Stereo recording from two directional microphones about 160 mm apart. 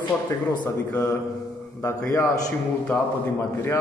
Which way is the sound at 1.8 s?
20° left (ahead or behind).